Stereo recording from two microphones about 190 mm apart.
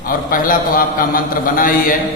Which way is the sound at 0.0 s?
45° left (ahead or behind).